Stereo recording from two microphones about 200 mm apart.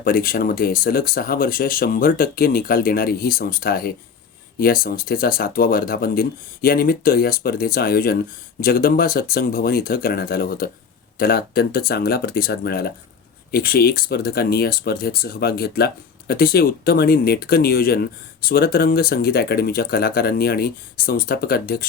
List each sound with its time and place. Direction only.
0.0 s speech: 50° left (ahead or behind)